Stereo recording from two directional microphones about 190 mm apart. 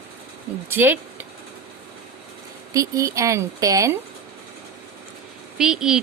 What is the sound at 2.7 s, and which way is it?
A woman's voice, 15° right (ahead or behind).